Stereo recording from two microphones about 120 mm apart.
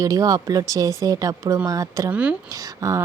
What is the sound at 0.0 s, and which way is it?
Speech, 30° right (ahead or behind).